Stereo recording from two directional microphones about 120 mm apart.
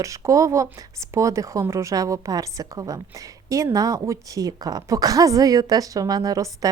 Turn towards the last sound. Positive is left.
turn(degrees=-30)  # may be behind; listen again after turning